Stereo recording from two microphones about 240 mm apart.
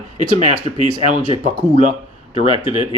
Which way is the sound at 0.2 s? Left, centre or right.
Right.